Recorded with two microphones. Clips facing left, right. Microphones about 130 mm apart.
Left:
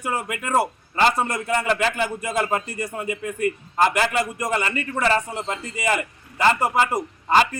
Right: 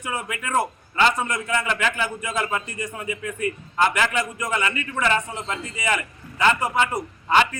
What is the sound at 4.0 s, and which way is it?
Speech, 40° left (ahead or behind).